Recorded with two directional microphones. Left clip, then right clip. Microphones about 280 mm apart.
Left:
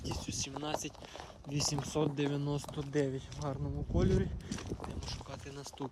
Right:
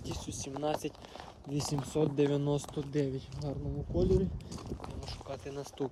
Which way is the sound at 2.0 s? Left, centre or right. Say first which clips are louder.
Right 6 dB; centre.